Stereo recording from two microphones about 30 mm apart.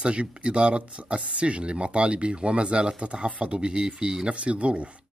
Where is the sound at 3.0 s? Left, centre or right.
Right.